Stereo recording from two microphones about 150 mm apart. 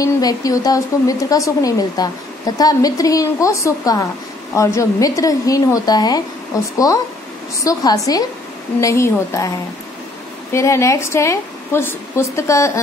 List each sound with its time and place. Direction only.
0.0 s speech: 25° left (ahead or behind)
10.5 s speech: 20° left (ahead or behind)